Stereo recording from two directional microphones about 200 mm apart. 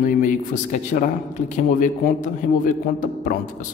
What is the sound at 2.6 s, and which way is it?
Speech, 40° left (ahead or behind).